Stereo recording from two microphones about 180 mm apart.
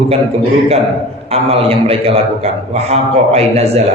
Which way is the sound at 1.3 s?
35° right (ahead or behind).